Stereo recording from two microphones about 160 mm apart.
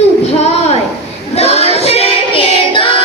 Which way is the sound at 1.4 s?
40° left (ahead or behind).